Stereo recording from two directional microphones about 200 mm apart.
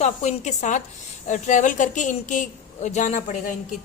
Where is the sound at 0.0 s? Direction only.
35° left (ahead or behind).